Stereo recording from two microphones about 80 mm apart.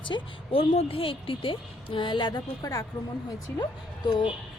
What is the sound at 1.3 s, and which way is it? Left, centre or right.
Speech, left.